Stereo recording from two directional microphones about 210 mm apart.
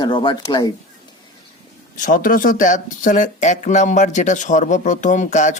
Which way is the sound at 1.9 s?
40° left (ahead or behind).